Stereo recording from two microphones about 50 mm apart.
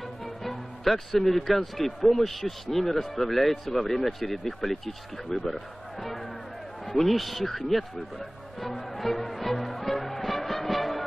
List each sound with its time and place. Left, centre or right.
0.2 s a man's voice: centre
9.2 s music: centre